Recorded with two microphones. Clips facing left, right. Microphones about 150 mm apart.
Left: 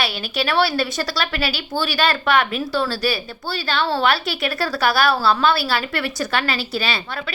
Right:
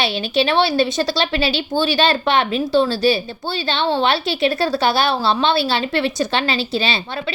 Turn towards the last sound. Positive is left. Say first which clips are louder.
# right 3 dB
turn(degrees=-25)  # may be behind; listen again after turning